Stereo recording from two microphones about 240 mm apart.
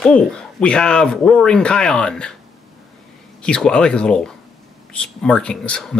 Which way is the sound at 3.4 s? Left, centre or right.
Centre.